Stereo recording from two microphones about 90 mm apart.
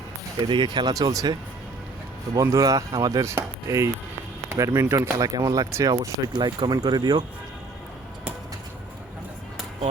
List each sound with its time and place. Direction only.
0.3 s speech: 60° right (ahead or behind)